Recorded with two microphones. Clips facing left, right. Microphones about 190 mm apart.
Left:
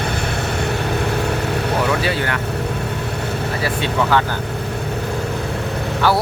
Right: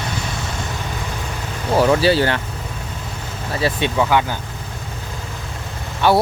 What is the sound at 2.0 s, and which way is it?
Vehicle, 30° right (ahead or behind).